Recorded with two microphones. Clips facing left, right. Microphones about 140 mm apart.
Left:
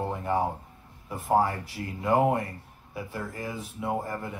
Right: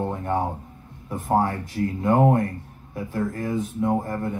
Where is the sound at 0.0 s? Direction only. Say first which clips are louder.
Right 3 dB; 5° left (ahead or behind).